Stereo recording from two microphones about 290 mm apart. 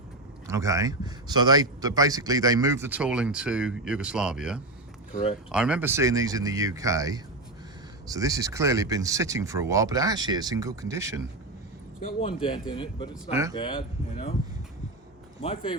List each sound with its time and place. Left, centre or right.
0.4 s speech: centre
11.9 s speech: left
15.4 s speech: centre